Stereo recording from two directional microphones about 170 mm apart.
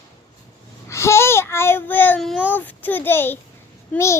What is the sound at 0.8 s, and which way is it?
Babbling, 15° left (ahead or behind).